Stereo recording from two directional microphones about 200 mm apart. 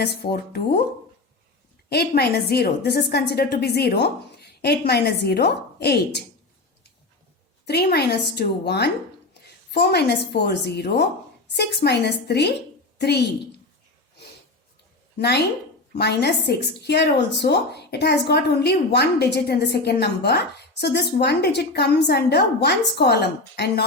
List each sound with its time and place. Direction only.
0.0 s a woman's voice: 50° left (ahead or behind)
1.9 s a woman's voice: 55° left (ahead or behind)
7.6 s a woman's voice: 55° left (ahead or behind)
15.2 s a woman's voice: 55° left (ahead or behind)